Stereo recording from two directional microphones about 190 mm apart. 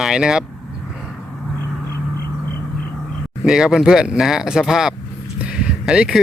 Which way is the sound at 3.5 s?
5° right (ahead or behind).